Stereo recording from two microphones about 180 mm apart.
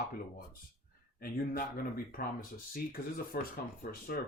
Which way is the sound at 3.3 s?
55° left (ahead or behind).